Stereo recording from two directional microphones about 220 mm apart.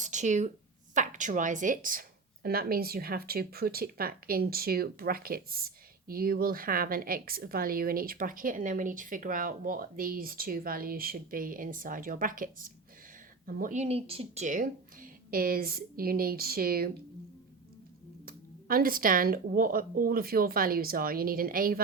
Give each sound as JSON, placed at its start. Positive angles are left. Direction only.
{"t": 0.0, "sound": "a sound", "side_deg": -35}
{"t": 0.9, "sound": "a woman's voice", "side_deg": -35}
{"t": 18.3, "sound": "a woman's voice", "side_deg": -40}